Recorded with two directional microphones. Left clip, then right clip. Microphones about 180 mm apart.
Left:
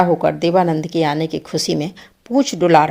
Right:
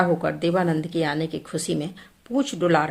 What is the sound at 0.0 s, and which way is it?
Speech, 30° left (ahead or behind).